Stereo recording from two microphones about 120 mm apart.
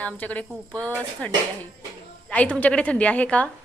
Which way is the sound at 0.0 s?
10° left (ahead or behind).